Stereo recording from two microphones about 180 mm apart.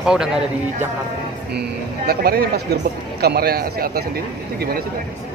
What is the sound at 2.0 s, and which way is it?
A man's voice, 60° right (ahead or behind).